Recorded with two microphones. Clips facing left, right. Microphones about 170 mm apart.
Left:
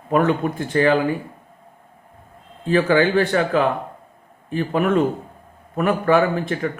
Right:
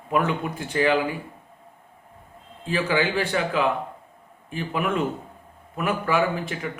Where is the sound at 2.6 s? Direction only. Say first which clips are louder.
Left 7 dB; 40° left (ahead or behind).